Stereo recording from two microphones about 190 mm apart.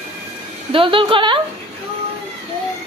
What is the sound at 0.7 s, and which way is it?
Speech, 25° right (ahead or behind).